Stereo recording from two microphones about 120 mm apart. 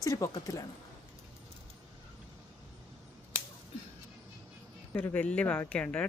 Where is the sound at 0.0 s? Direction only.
30° left (ahead or behind).